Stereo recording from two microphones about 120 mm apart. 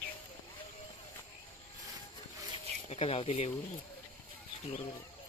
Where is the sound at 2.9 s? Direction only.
55° left (ahead or behind).